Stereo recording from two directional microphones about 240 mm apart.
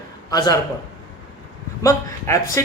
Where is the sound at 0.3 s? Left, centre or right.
Centre.